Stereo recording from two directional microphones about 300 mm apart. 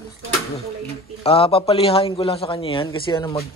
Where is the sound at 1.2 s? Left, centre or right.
Centre.